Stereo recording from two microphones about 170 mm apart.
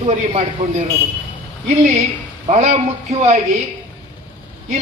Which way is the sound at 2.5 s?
40° right (ahead or behind).